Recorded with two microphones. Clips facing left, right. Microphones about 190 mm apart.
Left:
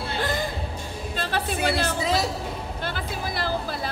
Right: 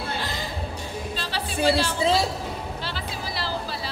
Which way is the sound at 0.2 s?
50° left (ahead or behind).